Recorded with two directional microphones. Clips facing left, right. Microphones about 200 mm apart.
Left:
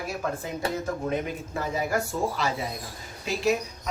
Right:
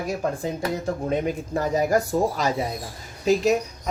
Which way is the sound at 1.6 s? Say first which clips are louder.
Right 6 dB; 40° right (ahead or behind).